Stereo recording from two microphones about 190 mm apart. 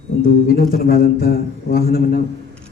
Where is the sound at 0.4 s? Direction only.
50° left (ahead or behind).